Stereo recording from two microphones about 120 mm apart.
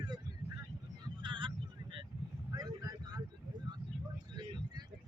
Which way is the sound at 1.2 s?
45° right (ahead or behind).